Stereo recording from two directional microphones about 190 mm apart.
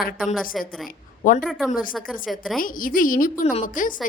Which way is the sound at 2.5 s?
45° left (ahead or behind).